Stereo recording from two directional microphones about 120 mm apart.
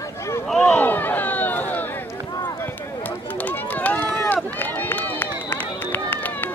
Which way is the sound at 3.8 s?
15° left (ahead or behind).